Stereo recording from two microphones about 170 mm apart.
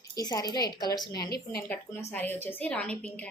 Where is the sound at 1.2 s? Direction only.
65° left (ahead or behind).